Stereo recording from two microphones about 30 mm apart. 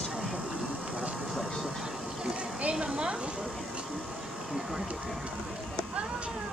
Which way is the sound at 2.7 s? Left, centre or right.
Right.